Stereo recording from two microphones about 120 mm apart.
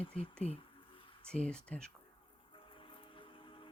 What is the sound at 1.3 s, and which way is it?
Speech, 10° left (ahead or behind).